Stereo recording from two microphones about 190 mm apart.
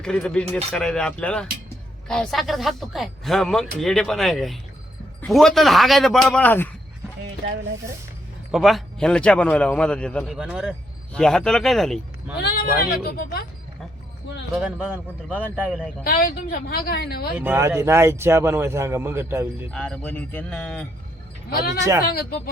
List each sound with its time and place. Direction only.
0.0 s a man's voice: 5° left (ahead or behind)
7.4 s speech: 60° right (ahead or behind)
8.5 s a man's voice: centre (ahead or behind)
12.4 s speech: 55° left (ahead or behind)
14.5 s a man's voice: 5° right (ahead or behind)
16.0 s speech: 50° left (ahead or behind)
17.3 s a man's voice: 10° right (ahead or behind)
19.7 s speech: 5° left (ahead or behind)